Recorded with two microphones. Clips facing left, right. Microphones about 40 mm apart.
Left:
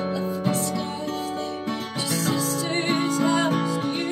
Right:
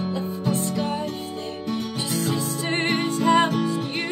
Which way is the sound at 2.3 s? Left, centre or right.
Right.